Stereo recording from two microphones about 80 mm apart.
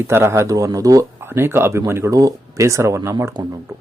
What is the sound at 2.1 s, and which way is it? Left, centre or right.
Speech, right.